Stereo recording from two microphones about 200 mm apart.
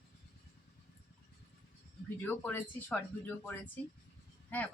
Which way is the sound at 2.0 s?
10° left (ahead or behind).